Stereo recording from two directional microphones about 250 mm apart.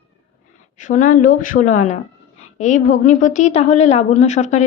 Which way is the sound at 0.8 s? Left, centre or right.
Left.